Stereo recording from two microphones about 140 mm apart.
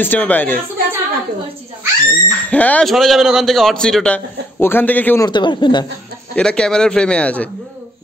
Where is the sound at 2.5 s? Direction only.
10° left (ahead or behind).